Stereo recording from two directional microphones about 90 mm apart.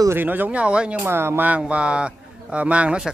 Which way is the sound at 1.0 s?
25° right (ahead or behind).